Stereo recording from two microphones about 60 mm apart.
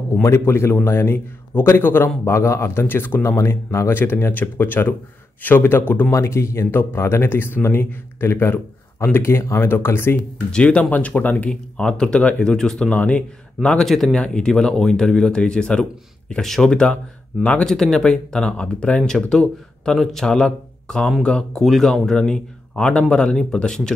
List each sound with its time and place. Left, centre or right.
0.1 s speech: left
2.2 s speech: left
2.9 s speech: left
3.3 s speech: left
3.9 s speech: left
6.1 s speech: left
10.5 s speech: centre
12.9 s speech: left
13.8 s speech: centre
14.1 s speech: centre
17.6 s speech: centre